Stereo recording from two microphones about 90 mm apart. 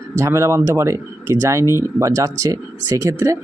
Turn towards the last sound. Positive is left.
turn(degrees=-35)  # may be behind; listen again after turning